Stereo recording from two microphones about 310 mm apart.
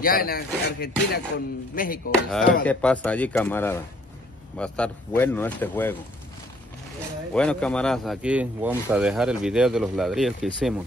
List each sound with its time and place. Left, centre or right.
0.0 s speech: left
2.6 s speech: centre
7.3 s speech: centre